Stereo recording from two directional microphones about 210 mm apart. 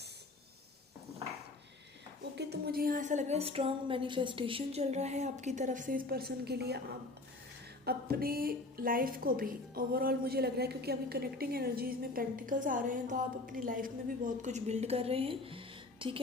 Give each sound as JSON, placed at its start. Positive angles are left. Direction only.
{"t": 2.3, "sound": "a woman's voice", "side_deg": -50}
{"t": 7.9, "sound": "a woman's voice", "side_deg": -45}